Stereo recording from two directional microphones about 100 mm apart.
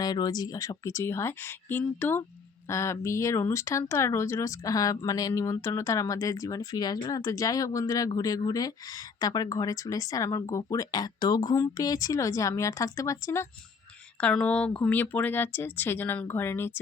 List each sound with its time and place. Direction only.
0.0 s speech: 45° left (ahead or behind)
14.2 s speech: 10° left (ahead or behind)